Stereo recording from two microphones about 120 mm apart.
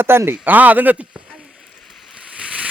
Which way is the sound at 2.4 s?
10° right (ahead or behind).